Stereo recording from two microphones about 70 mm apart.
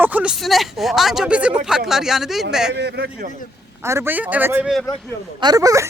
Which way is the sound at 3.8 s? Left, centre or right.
Right.